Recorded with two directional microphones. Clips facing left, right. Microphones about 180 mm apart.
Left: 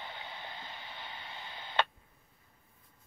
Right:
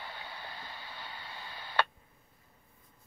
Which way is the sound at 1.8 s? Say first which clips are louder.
Even; 20° left (ahead or behind).